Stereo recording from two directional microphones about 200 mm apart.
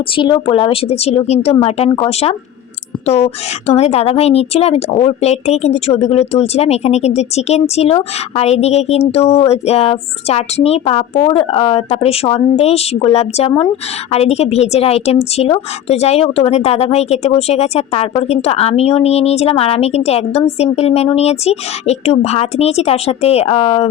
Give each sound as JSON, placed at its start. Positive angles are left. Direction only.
{"t": 0.0, "sound": "a woman's voice", "side_deg": 25}